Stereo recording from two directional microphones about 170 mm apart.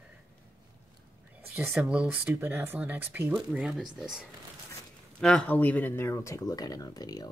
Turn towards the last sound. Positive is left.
turn(degrees=20)  # may be behind; listen again after turning